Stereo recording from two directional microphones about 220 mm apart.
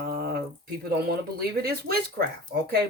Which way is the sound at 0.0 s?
45° right (ahead or behind).